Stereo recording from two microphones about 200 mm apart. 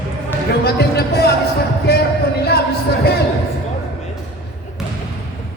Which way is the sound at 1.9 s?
50° left (ahead or behind).